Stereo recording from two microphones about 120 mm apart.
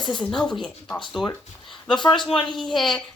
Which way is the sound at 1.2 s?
40° left (ahead or behind).